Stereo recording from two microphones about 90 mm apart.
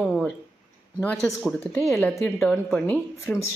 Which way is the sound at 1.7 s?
30° left (ahead or behind).